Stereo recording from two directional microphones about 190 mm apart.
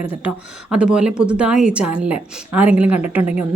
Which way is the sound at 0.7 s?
5° right (ahead or behind).